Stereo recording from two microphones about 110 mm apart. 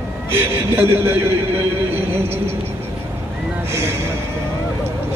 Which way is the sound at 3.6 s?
25° right (ahead or behind).